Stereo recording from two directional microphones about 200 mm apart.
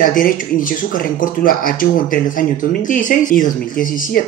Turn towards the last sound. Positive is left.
turn(degrees=45)  # may be behind; listen again after turning